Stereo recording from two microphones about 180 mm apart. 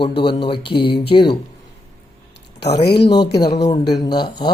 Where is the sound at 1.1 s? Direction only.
25° left (ahead or behind).